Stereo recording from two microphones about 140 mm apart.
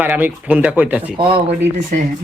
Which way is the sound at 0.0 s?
15° right (ahead or behind).